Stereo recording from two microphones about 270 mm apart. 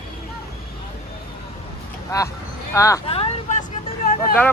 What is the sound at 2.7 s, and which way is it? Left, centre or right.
Speech, centre.